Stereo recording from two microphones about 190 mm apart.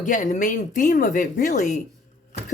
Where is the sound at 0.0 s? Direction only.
45° left (ahead or behind).